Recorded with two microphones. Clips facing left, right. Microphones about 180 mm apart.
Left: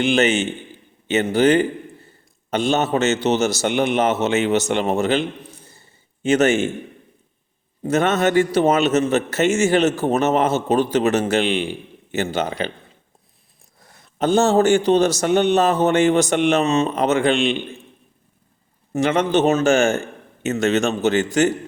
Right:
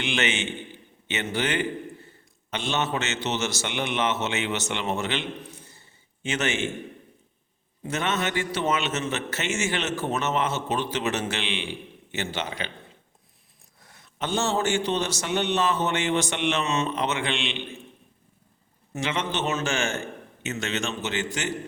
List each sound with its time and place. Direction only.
0.0 s a man's voice: 40° left (ahead or behind)
7.9 s a man's voice: 45° left (ahead or behind)
13.8 s a man's voice: 35° left (ahead or behind)
18.9 s a man's voice: 40° left (ahead or behind)